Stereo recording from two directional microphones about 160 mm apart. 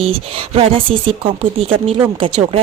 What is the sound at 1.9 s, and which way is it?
Speech, 40° right (ahead or behind).